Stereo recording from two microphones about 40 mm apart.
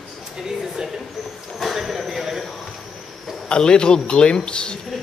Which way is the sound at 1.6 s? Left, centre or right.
Centre.